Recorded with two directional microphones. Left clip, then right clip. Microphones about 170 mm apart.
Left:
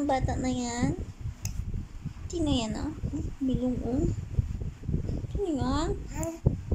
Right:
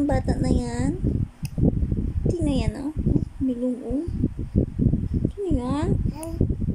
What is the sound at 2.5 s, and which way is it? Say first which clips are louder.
Speech: right 3 dB; 25° right (ahead or behind).